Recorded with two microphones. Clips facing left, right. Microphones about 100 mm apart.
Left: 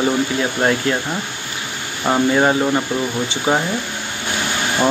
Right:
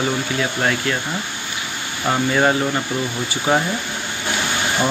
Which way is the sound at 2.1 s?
15° left (ahead or behind).